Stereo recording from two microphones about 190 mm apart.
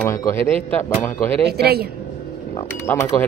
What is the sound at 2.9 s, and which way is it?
Speech, 10° left (ahead or behind).